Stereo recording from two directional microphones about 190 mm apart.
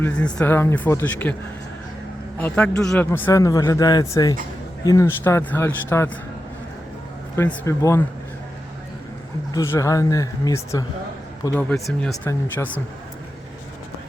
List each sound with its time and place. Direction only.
0.0 s speech: 5° left (ahead or behind)
2.4 s a man's voice: 5° left (ahead or behind)
7.3 s speech: 15° left (ahead or behind)
9.5 s speech: 15° left (ahead or behind)
11.5 s speech: 5° left (ahead or behind)